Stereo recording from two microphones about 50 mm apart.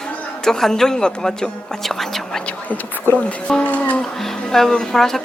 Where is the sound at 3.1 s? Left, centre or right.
Left.